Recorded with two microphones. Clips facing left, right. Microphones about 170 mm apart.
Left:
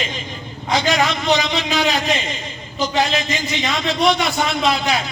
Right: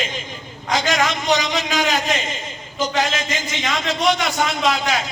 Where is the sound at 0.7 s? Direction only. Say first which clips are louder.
Left 2 dB; 45° right (ahead or behind).